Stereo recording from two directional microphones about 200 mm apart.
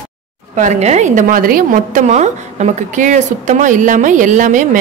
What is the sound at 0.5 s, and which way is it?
A woman's voice, 35° right (ahead or behind).